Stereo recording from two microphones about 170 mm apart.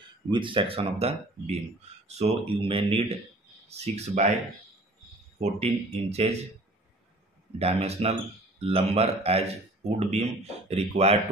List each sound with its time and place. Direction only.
0.3 s speech: 30° right (ahead or behind)
5.4 s speech: 40° right (ahead or behind)
7.5 s speech: 35° right (ahead or behind)